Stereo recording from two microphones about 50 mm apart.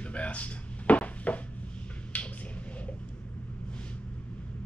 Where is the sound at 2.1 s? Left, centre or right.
Left.